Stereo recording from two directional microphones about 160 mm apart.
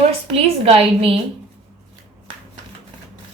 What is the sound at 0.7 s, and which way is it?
Speech, 35° right (ahead or behind).